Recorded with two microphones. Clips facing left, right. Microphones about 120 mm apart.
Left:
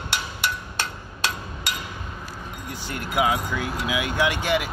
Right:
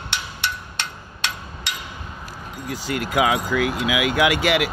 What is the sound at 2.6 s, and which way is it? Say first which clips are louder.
Speech: right 7 dB; 90° right.